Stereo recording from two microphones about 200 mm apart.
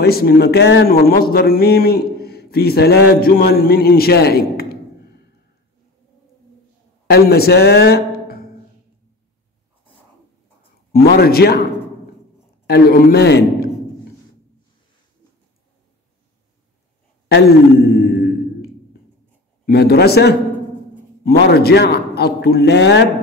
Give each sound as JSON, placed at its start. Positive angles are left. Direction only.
{"t": 0.0, "sound": "speech", "side_deg": 50}
{"t": 7.1, "sound": "a man's voice", "side_deg": 50}
{"t": 10.9, "sound": "a man's voice", "side_deg": 50}
{"t": 12.6, "sound": "a man's voice", "side_deg": 55}
{"t": 17.3, "sound": "a sound", "side_deg": 55}
{"t": 19.6, "sound": "a man's voice", "side_deg": 55}